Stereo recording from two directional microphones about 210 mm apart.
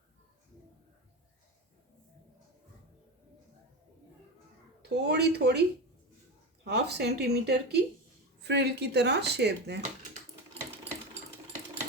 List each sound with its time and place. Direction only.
4.8 s speech: 50° right (ahead or behind)
6.7 s speech: 50° right (ahead or behind)